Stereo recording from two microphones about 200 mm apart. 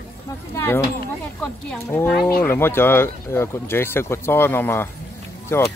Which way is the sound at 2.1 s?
50° left (ahead or behind).